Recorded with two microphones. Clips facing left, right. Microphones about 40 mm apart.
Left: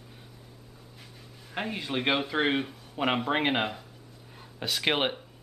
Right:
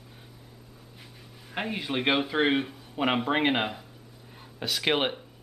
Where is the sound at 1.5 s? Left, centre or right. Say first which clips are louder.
Right 1 dB; centre.